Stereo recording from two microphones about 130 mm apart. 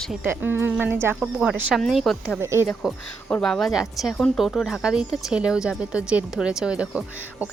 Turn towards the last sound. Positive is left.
turn(degrees=-10)  # may be behind; listen again after turning